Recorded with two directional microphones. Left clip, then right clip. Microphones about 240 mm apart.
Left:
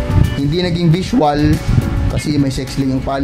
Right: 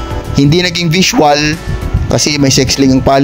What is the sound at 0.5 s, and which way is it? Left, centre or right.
A man's voice, right.